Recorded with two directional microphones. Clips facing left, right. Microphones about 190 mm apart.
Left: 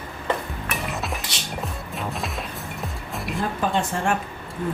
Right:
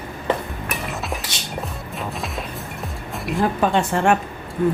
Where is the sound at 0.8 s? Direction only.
Centre (ahead or behind).